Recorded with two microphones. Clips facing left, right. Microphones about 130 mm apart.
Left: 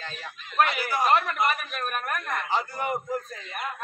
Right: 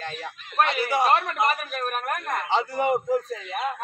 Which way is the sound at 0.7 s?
25° right (ahead or behind).